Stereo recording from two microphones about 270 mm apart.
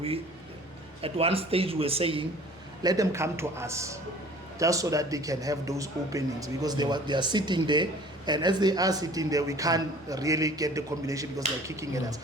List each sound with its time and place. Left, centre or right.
1.0 s a man's voice: right